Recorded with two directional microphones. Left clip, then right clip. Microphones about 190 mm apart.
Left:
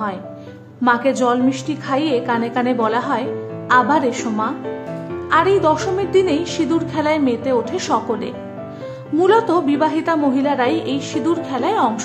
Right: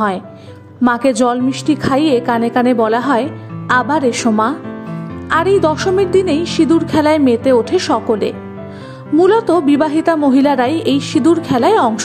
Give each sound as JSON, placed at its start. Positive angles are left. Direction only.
{"t": 0.8, "sound": "a woman's voice", "side_deg": -35}